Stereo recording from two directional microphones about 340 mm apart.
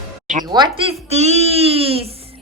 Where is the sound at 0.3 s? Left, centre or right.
Centre.